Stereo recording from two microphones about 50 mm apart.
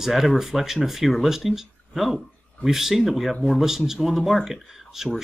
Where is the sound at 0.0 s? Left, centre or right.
Centre.